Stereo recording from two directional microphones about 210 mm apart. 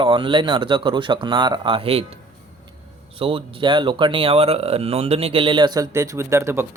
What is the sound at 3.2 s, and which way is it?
Speech, 25° right (ahead or behind).